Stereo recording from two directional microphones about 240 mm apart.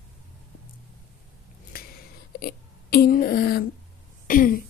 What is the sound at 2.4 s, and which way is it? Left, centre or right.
A woman's voice, left.